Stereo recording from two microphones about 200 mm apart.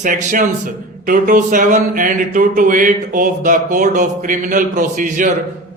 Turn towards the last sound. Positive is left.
turn(degrees=-40)  # may be behind; listen again after turning